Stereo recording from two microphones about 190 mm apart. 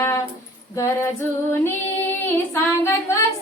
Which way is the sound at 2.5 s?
15° left (ahead or behind).